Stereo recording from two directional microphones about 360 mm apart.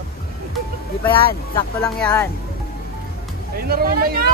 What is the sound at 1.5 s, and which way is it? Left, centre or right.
Speech, centre.